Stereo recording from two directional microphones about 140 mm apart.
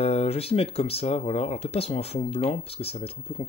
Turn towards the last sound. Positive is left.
turn(degrees=45)  # may be behind; listen again after turning